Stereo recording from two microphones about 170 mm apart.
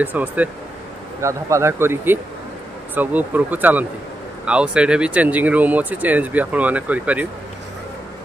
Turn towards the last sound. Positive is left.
turn(degrees=-10)  # may be behind; listen again after turning